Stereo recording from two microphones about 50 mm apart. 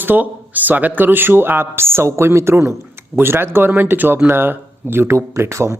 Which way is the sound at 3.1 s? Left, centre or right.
Right.